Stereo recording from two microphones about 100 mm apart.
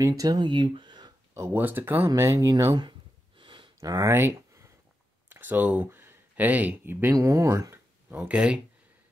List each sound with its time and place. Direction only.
0.2 s speech: 45° right (ahead or behind)
1.3 s speech: 25° right (ahead or behind)
2.7 s a sound: 50° right (ahead or behind)
3.8 s speech: 40° right (ahead or behind)
4.1 s speech: 25° right (ahead or behind)
8.1 s speech: 15° right (ahead or behind)